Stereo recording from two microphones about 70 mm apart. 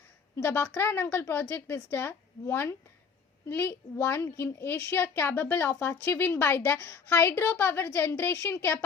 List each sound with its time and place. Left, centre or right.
0.4 s a woman's voice: left